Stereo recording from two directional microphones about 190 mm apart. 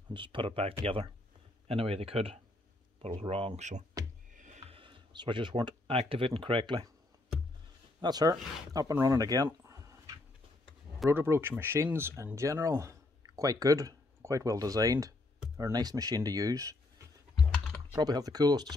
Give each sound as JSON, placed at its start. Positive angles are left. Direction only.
{"t": 0.1, "sound": "speech", "side_deg": -25}
{"t": 8.0, "sound": "speech", "side_deg": -20}
{"t": 17.9, "sound": "speech", "side_deg": -20}